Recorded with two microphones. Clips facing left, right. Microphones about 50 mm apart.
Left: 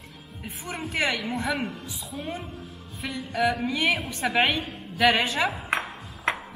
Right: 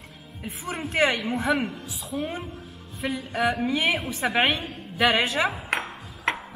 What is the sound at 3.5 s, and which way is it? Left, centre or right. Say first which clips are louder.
A woman's voice: right 3 dB; centre.